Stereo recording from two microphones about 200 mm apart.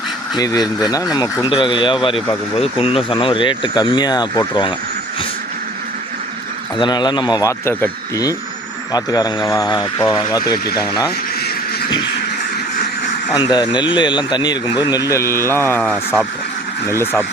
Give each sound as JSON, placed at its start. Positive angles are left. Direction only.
{"t": 0.3, "sound": "speech", "side_deg": 20}
{"t": 6.7, "sound": "speech", "side_deg": 20}
{"t": 13.3, "sound": "speech", "side_deg": 20}